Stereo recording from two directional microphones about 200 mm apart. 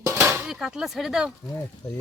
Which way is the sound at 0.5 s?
Centre (ahead or behind).